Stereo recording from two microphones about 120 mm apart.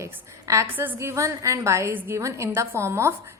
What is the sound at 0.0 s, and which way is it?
A woman's voice, 25° right (ahead or behind).